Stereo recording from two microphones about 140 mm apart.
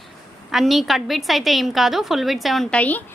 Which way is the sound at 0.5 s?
Centre (ahead or behind).